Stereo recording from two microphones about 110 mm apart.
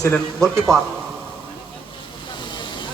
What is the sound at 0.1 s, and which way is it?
Speech, 5° left (ahead or behind).